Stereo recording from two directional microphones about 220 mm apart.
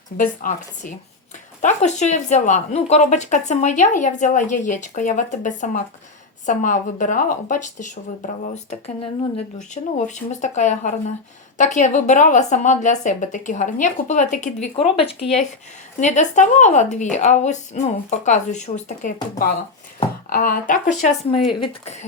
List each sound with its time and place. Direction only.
0.2 s speech: 35° left (ahead or behind)
9.7 s speech: 30° left (ahead or behind)
16.0 s speech: 35° left (ahead or behind)